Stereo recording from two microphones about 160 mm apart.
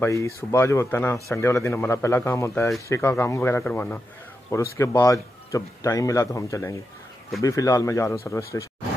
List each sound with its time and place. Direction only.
0.0 s speech: 20° left (ahead or behind)